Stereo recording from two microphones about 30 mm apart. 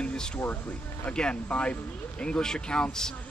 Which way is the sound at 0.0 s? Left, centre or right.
Left.